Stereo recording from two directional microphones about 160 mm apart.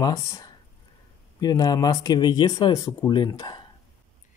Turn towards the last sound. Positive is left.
turn(degrees=25)  # may be behind; listen again after turning